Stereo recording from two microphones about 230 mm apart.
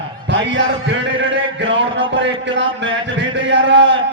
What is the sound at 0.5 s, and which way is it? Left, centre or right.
A man's voice, right.